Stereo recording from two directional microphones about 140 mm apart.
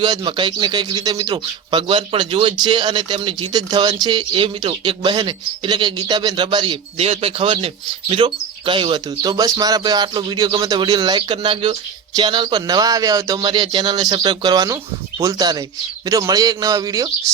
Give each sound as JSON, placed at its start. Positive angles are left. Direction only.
{"t": 0.3, "sound": "speech", "side_deg": -35}
{"t": 7.0, "sound": "a man's voice", "side_deg": -45}